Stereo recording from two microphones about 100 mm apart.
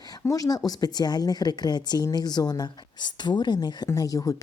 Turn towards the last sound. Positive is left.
turn(degrees=35)  # may be behind; listen again after turning